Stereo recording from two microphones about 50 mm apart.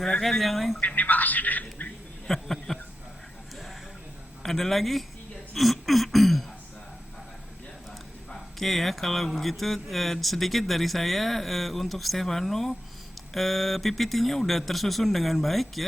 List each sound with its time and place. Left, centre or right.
0.0 s speech: centre
0.8 s speech: left
2.2 s a sound: centre
4.4 s speech: centre
5.5 s a sound: centre
8.3 s speech: centre